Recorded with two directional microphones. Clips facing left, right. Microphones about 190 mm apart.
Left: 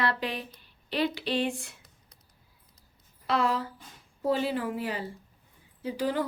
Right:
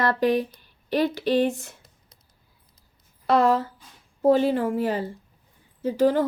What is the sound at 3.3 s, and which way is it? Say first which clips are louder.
Speech: right 8 dB; 45° right (ahead or behind).